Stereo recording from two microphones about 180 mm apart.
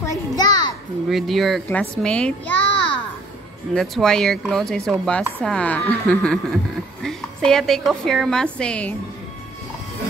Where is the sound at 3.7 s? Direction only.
5° left (ahead or behind).